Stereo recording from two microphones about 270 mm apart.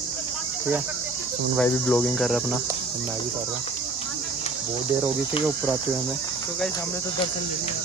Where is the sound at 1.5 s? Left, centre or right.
Centre.